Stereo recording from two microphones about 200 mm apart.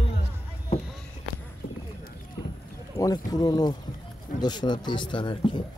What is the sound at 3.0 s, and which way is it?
Speech, 20° left (ahead or behind).